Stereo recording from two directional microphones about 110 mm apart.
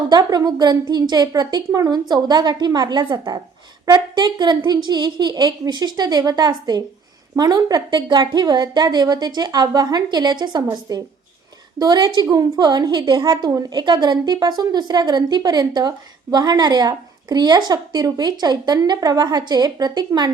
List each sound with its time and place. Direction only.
0.1 s a woman's voice: 40° right (ahead or behind)